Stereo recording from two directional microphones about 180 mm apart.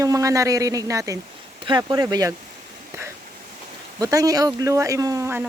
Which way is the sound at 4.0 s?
20° right (ahead or behind).